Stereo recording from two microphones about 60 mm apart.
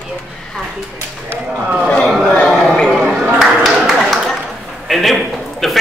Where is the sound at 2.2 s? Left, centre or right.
Left.